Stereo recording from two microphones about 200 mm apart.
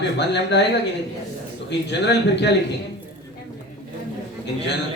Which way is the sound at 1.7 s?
60° left (ahead or behind).